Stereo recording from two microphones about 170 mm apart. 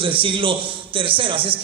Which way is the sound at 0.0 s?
30° right (ahead or behind).